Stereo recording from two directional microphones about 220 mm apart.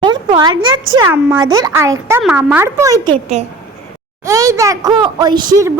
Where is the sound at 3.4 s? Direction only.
30° right (ahead or behind).